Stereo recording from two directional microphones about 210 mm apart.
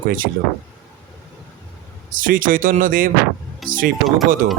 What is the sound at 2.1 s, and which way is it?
Speech, 40° right (ahead or behind).